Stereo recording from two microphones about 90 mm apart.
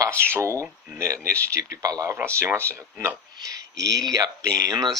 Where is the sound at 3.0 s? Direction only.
40° right (ahead or behind).